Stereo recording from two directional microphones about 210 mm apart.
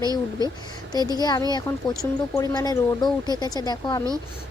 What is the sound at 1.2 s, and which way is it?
Speech, 20° left (ahead or behind).